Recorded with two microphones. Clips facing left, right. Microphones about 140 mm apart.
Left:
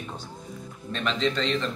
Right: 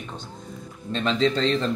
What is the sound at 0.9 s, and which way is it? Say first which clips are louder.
Speech: right 4 dB; 35° right (ahead or behind).